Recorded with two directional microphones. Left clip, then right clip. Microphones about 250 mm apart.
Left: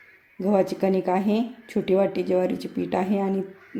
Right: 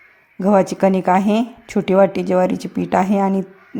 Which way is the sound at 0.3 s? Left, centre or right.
Right.